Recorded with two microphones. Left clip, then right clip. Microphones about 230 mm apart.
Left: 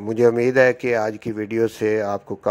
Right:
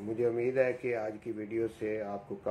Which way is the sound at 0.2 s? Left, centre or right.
Left.